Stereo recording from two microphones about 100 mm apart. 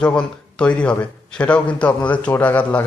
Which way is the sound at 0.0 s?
10° left (ahead or behind).